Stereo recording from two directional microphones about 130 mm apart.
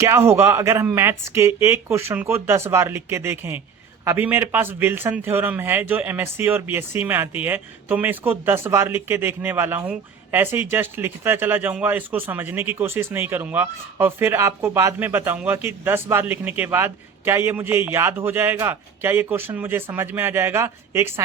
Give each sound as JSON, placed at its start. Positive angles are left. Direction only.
{"t": 0.3, "sound": "speech", "side_deg": -20}